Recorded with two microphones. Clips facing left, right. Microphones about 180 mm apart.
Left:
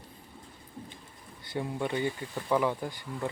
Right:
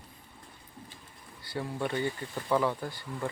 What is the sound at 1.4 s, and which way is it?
Speech, 20° left (ahead or behind).